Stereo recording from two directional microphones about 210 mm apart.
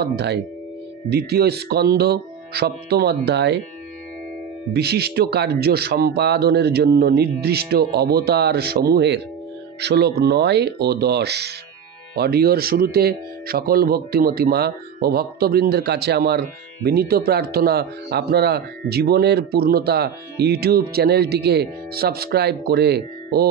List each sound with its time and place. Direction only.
0.0 s speech: 50° right (ahead or behind)
4.7 s speech: 50° right (ahead or behind)